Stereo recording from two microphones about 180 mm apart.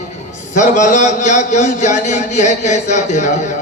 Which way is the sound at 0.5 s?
45° left (ahead or behind).